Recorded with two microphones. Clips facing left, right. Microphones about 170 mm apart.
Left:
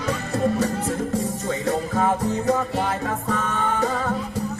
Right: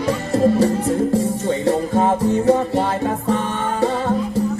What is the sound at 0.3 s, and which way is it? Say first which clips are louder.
Music: right 7 dB; 30° right (ahead or behind).